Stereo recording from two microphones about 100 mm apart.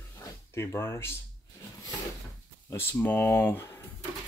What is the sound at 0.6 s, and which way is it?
Speech, 25° left (ahead or behind).